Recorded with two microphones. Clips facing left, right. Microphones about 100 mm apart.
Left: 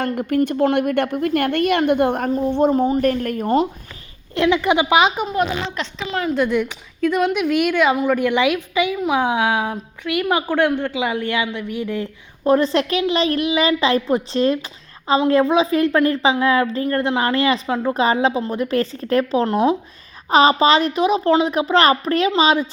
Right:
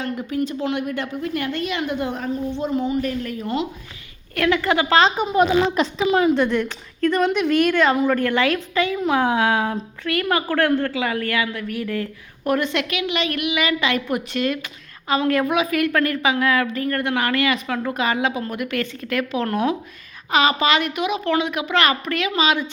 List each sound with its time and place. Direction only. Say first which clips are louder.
0.0 s a woman's voice: left 5 dB; 55° left (ahead or behind)
4.4 s speech: left 3 dB; 20° left (ahead or behind)
5.3 s speech: right 4 dB; 5° right (ahead or behind); by 12.0 s 20° left (ahead or behind)
12.5 s a child's voice: left 5 dB; 30° left (ahead or behind)